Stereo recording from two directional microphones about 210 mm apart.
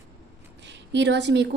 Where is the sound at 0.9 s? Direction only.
55° right (ahead or behind).